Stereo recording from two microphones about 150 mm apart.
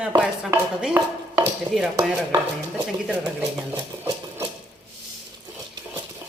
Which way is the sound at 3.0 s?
10° right (ahead or behind).